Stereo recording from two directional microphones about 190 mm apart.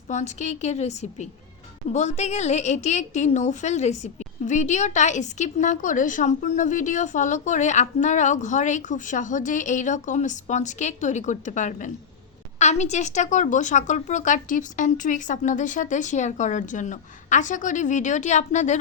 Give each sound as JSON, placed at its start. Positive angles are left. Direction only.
{"t": 0.1, "sound": "a woman's voice", "side_deg": 40}